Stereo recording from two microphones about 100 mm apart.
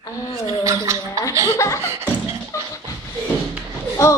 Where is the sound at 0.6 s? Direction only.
30° right (ahead or behind).